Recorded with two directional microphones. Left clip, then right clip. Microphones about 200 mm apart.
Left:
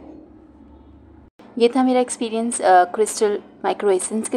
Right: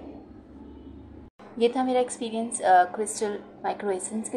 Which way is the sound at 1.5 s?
30° left (ahead or behind).